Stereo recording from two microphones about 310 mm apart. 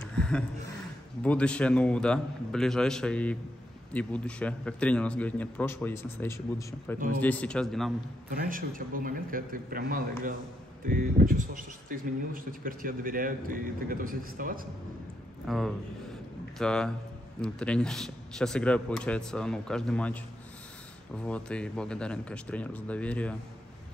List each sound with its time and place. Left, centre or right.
0.1 s a sound: centre
1.2 s a man's voice: centre
8.3 s speech: right
15.4 s a man's voice: centre
21.2 s a man's voice: centre